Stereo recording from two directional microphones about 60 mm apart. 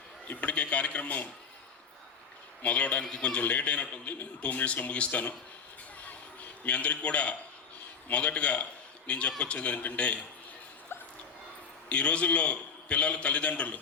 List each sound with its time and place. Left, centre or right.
0.3 s a man's voice: left
2.6 s a man's voice: left
6.1 s music: left
8.1 s a man's voice: left
11.9 s a man's voice: left